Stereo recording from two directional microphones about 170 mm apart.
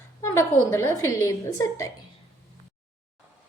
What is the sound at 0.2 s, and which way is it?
A woman's voice, 15° left (ahead or behind).